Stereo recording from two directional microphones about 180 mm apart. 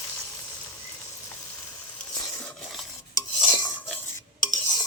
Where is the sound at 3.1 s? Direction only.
20° left (ahead or behind).